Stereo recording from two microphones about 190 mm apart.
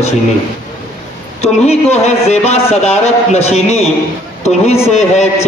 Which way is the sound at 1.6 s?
35° left (ahead or behind).